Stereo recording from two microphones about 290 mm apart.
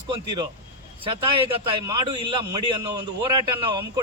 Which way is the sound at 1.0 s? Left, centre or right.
Centre.